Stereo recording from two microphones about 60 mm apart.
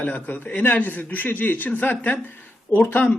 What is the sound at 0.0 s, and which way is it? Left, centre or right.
A man's voice, left.